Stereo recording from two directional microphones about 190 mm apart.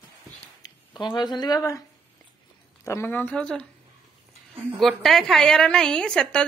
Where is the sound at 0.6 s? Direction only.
25° left (ahead or behind).